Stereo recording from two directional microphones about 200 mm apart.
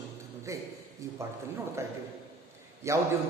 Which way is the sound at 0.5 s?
15° right (ahead or behind).